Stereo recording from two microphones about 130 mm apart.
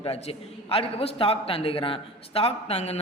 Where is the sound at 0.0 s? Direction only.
45° left (ahead or behind).